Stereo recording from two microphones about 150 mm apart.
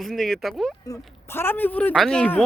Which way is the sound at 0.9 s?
15° left (ahead or behind).